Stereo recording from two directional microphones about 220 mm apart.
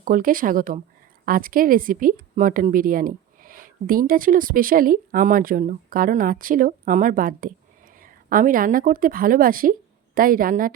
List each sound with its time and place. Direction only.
0.0 s a woman's voice: 40° right (ahead or behind)